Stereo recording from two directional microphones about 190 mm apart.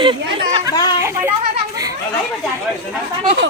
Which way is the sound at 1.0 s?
15° right (ahead or behind).